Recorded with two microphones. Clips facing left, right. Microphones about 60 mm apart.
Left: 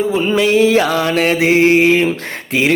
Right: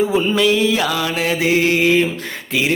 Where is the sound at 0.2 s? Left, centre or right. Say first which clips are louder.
Left 2 dB; centre.